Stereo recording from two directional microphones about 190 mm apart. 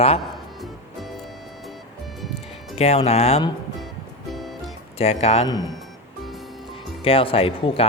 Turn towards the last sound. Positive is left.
turn(degrees=30)  # may be behind; listen again after turning